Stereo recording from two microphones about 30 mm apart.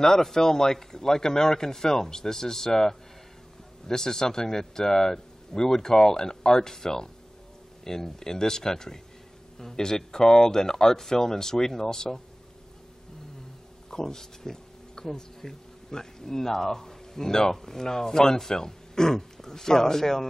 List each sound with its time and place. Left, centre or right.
0.0 s a man's voice: centre
13.8 s a man's voice: centre